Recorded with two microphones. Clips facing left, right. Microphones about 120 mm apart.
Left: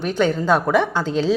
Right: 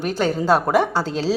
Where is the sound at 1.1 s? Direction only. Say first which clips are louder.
Left 3 dB; 5° right (ahead or behind).